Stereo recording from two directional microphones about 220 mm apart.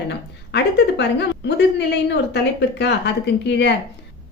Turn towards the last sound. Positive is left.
turn(degrees=50)  # may be behind; listen again after turning